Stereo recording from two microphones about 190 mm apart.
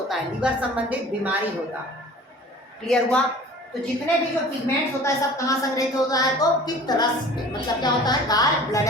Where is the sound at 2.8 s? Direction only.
5° left (ahead or behind).